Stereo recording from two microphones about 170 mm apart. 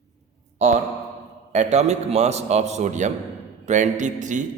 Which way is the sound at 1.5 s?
40° right (ahead or behind).